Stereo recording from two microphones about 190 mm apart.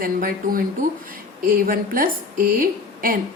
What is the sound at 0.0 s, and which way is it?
A woman's voice, 50° right (ahead or behind).